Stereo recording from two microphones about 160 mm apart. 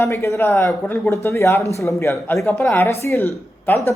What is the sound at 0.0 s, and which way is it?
Speech, 15° left (ahead or behind).